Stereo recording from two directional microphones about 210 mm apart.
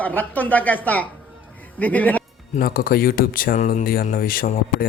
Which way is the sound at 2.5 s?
45° left (ahead or behind).